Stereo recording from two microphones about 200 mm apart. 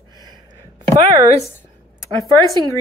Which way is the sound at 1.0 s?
30° right (ahead or behind).